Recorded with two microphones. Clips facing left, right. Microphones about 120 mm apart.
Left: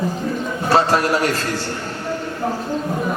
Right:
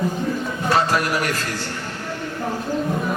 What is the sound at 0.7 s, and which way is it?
Speech, 30° left (ahead or behind).